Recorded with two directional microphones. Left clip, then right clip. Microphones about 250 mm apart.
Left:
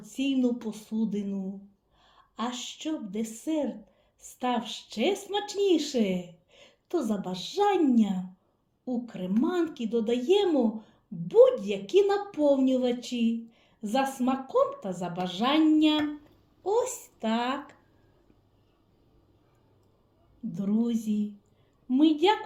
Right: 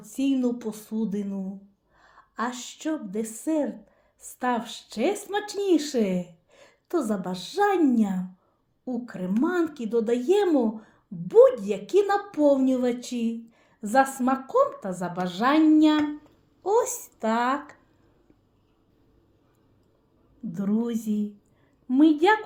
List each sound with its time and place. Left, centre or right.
0.0 s a woman's voice: right
21.0 s speech: right